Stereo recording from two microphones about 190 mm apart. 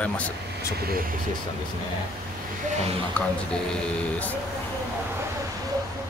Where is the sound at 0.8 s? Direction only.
50° right (ahead or behind).